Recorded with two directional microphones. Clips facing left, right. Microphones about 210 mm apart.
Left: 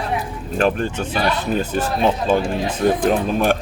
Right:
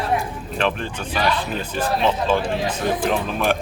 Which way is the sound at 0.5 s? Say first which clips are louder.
Left 5 dB; 45° left (ahead or behind).